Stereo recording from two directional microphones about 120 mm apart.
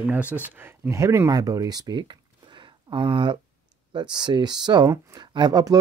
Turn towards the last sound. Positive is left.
turn(degrees=-35)  # may be behind; listen again after turning